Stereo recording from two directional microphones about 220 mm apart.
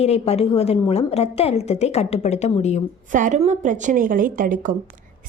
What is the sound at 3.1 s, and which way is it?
A woman's voice, 35° right (ahead or behind).